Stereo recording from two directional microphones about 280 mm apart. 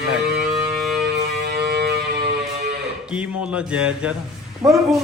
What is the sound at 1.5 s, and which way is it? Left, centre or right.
Music, right.